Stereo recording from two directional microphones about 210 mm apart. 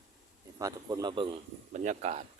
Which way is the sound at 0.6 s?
20° right (ahead or behind).